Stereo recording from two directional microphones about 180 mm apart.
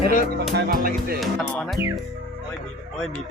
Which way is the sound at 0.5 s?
55° right (ahead or behind).